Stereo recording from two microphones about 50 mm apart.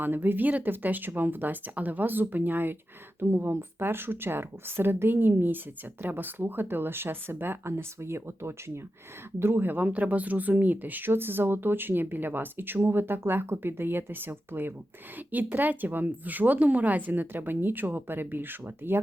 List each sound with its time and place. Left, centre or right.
0.0 s speech: right
3.2 s speech: right
7.6 s speech: right
9.6 s speech: right